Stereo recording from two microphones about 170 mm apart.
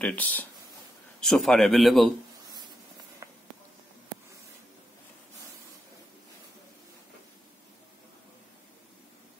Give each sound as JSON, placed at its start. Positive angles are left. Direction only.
{"t": 0.0, "sound": "speech", "side_deg": 10}
{"t": 3.2, "sound": "walk", "side_deg": -20}